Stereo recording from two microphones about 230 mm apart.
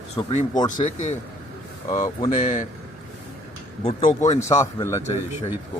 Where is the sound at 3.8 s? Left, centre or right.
Left.